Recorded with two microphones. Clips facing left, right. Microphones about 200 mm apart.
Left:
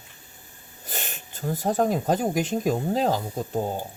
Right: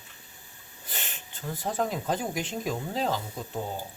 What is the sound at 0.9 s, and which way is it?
Speech, 40° left (ahead or behind).